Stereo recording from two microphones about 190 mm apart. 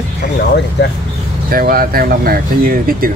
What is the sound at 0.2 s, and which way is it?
Speech, 60° left (ahead or behind).